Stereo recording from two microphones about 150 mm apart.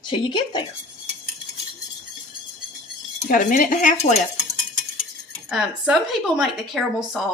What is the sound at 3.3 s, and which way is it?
Cutlery, 60° left (ahead or behind).